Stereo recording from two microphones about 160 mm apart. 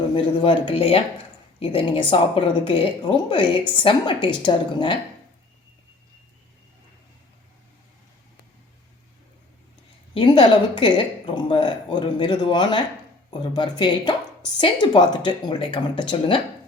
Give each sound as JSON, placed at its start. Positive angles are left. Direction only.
{"t": 0.1, "sound": "speech", "side_deg": 35}
{"t": 10.2, "sound": "a woman's voice", "side_deg": 30}